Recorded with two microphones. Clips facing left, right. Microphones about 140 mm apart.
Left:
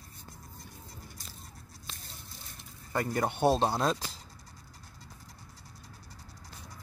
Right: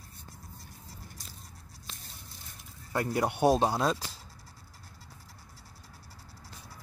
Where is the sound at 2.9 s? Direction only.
5° right (ahead or behind).